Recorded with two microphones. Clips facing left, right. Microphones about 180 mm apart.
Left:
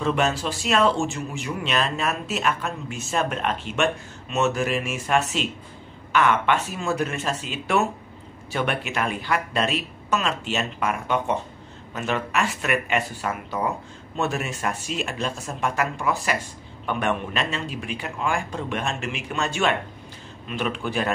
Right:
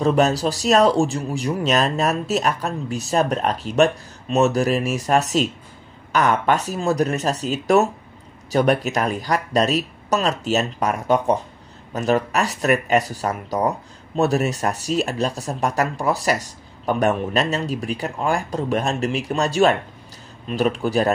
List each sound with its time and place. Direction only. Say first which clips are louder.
0.0 s speech: right 6 dB; 40° right (ahead or behind)